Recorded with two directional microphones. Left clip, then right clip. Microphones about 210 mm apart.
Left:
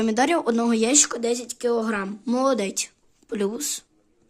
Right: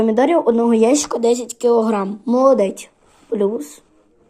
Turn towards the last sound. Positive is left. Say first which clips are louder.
# right 7 dB
turn(degrees=25)  # may be behind; listen again after turning